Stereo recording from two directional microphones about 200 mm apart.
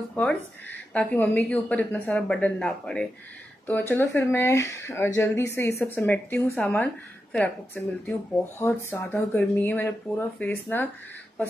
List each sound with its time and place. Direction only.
0.1 s a woman's voice: 5° left (ahead or behind)